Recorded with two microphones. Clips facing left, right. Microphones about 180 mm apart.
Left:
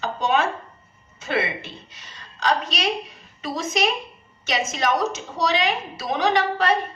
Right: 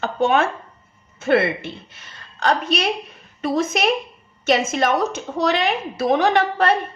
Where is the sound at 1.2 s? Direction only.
55° right (ahead or behind).